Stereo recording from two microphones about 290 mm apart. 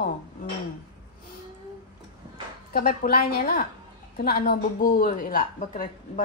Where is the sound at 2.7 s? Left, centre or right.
Left.